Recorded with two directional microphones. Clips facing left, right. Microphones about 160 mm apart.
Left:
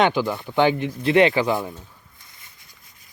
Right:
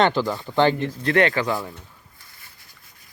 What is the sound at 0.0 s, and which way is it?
Speech, 10° left (ahead or behind).